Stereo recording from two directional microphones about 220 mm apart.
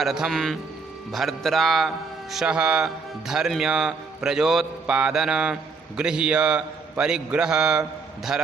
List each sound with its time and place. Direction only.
0.0 s a man's voice: centre (ahead or behind)